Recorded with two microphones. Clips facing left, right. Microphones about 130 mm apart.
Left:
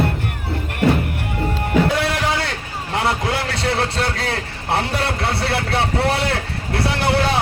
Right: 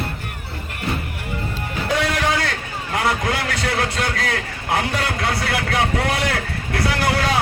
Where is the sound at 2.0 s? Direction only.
30° left (ahead or behind).